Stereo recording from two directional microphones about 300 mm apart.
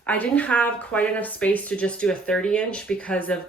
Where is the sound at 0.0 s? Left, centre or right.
Centre.